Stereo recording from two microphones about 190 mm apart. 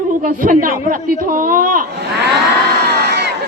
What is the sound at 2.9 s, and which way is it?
Crowd, 60° right (ahead or behind).